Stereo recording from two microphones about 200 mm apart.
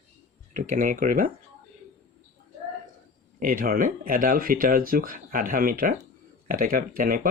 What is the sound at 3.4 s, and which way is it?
Speech, 45° right (ahead or behind).